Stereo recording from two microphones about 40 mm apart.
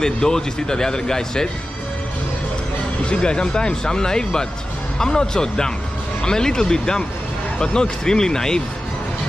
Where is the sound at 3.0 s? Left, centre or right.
Left.